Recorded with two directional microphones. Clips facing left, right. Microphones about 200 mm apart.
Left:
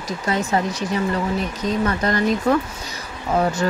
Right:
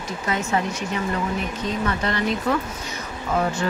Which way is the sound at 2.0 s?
45° left (ahead or behind).